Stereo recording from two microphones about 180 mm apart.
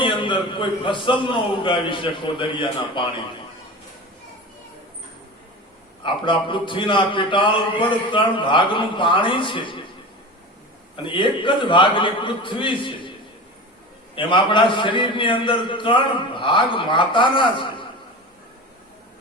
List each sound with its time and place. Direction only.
0.0 s a man's voice: 25° left (ahead or behind)
6.0 s a man's voice: 25° left (ahead or behind)
10.9 s a man's voice: 25° left (ahead or behind)
14.2 s a man's voice: 25° left (ahead or behind)